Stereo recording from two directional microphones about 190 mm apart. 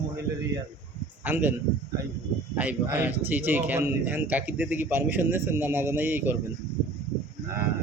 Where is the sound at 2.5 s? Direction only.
10° right (ahead or behind).